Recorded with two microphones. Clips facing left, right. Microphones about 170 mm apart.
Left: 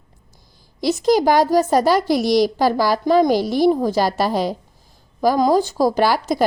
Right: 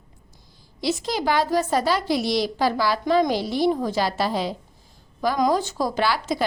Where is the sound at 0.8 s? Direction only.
40° left (ahead or behind).